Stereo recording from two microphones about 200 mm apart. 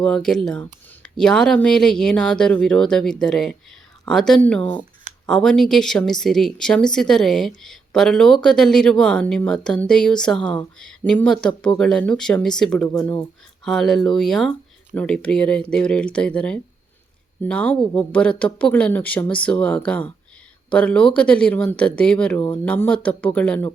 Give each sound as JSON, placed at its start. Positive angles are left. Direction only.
{"t": 0.0, "sound": "a woman's voice", "side_deg": 5}